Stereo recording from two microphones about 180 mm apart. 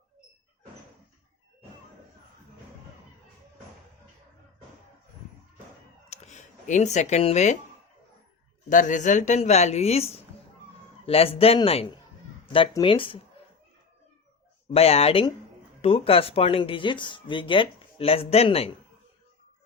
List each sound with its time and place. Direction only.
6.1 s a sound: 40° left (ahead or behind)
8.7 s speech: 45° left (ahead or behind); by 13.2 s 30° left (ahead or behind)
14.7 s speech: 35° left (ahead or behind)